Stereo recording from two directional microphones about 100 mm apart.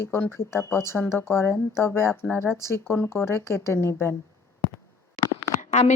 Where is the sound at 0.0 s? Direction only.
25° left (ahead or behind).